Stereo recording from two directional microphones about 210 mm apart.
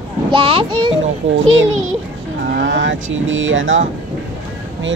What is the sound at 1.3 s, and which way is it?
Speech, 65° right (ahead or behind).